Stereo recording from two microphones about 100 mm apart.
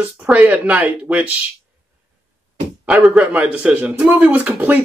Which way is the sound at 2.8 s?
10° right (ahead or behind).